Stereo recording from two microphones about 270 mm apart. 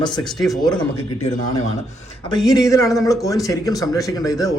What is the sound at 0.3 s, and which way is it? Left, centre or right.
Speech, centre.